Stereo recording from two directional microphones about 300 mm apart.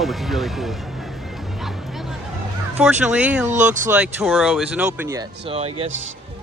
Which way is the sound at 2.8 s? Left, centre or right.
Centre.